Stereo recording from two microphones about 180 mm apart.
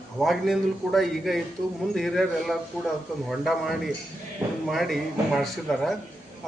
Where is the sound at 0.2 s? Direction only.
Centre (ahead or behind).